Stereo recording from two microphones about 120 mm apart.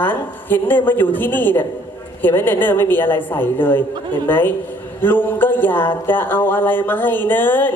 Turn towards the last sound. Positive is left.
turn(degrees=15)  # may be behind; listen again after turning